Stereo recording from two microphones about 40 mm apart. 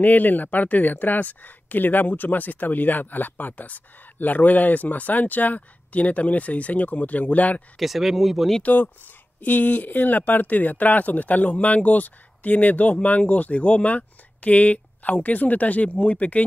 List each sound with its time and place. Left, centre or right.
0.0 s speech: left
7.8 s speech: centre
8.6 s speech: left